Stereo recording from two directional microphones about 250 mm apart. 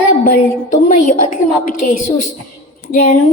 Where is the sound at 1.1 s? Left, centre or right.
Left.